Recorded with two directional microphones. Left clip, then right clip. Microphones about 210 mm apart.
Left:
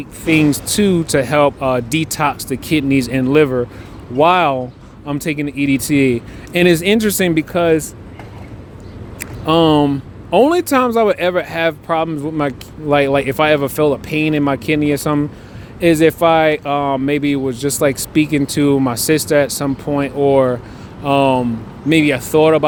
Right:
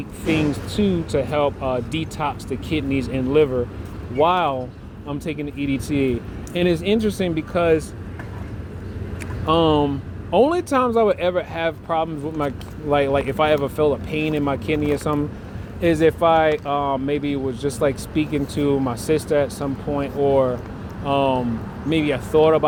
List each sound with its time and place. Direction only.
0.3 s speech: 55° left (ahead or behind)
9.5 s speech: 45° left (ahead or behind)